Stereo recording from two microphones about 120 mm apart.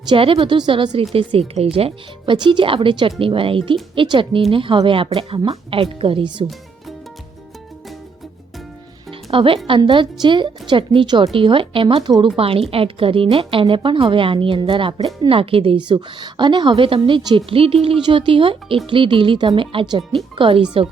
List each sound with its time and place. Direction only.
0.1 s a woman's voice: 50° right (ahead or behind)
1.1 s a woman's voice: 55° right (ahead or behind)
9.3 s a woman's voice: 45° right (ahead or behind)